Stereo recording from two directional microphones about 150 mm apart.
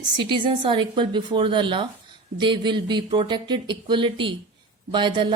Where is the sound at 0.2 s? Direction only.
35° right (ahead or behind).